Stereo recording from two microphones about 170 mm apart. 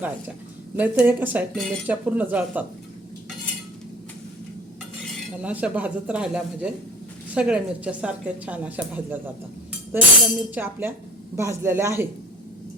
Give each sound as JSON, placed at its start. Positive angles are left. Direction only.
{"t": 0.8, "sound": "a woman's voice", "side_deg": -10}
{"t": 5.4, "sound": "a woman's voice", "side_deg": -10}